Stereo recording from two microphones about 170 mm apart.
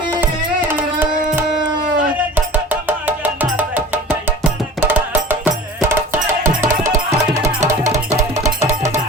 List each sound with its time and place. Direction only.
0.7 s tabla: 10° right (ahead or behind)
2.3 s music: 10° right (ahead or behind)
7.6 s music: 45° right (ahead or behind)
7.9 s music: 20° right (ahead or behind)